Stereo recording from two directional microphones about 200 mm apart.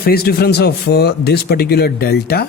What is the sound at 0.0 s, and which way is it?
Speech, 50° left (ahead or behind).